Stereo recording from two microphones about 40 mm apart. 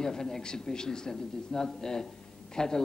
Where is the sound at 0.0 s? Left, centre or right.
Centre.